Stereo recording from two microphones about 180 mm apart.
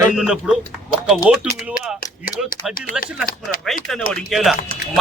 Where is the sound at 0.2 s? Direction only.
5° right (ahead or behind).